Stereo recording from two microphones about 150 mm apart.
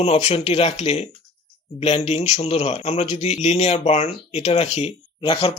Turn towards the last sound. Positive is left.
turn(degrees=35)  # may be behind; listen again after turning